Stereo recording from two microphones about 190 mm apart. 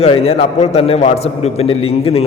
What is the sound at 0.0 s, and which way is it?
A man's voice, 30° left (ahead or behind).